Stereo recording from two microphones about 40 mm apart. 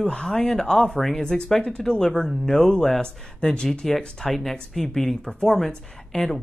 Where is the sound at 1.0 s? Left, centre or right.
Centre.